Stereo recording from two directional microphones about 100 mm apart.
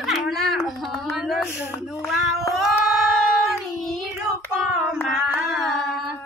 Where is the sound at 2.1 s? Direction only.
5° right (ahead or behind).